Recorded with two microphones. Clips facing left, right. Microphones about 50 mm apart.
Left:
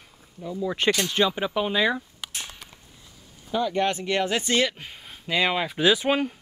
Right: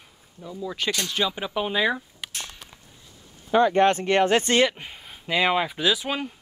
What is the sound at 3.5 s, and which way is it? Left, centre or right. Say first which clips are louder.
Speech: right 6 dB; right.